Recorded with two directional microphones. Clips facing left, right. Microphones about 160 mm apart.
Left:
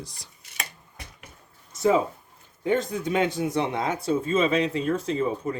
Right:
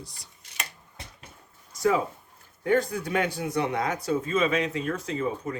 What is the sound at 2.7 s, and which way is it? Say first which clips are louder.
Speech: even; 20° left (ahead or behind).